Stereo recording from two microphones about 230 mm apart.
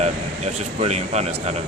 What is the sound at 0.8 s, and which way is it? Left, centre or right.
Speech, right.